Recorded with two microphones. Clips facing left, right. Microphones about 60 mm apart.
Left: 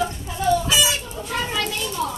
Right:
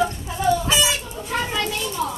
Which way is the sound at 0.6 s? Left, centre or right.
Right.